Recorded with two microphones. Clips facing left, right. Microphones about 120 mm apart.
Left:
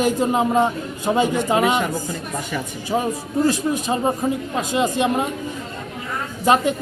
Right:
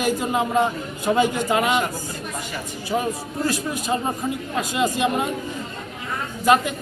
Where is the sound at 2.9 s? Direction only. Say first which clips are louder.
Left 3 dB; 25° left (ahead or behind).